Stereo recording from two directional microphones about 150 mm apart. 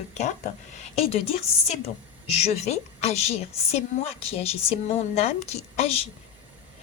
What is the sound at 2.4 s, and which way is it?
A woman's voice, 45° left (ahead or behind).